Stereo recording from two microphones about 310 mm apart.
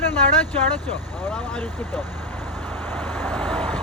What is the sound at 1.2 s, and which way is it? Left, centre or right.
Vehicle, centre.